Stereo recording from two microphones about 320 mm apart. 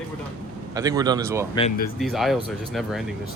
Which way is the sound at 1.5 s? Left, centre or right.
Centre.